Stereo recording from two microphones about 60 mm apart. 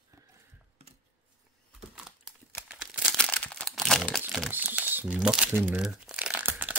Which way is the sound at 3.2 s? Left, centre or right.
Centre.